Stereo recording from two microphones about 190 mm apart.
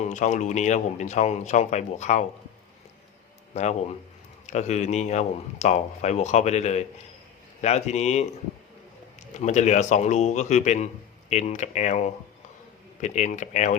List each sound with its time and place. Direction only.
0.0 s speech: 40° left (ahead or behind)
3.5 s speech: 35° left (ahead or behind)
9.3 s speech: 35° left (ahead or behind)